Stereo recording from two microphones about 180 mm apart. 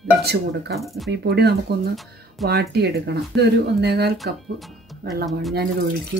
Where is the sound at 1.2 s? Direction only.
65° right (ahead or behind).